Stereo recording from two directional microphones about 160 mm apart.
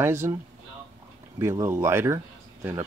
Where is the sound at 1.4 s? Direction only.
15° right (ahead or behind).